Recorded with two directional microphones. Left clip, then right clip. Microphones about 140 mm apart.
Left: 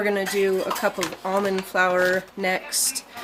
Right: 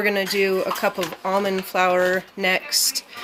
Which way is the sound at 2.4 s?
25° right (ahead or behind).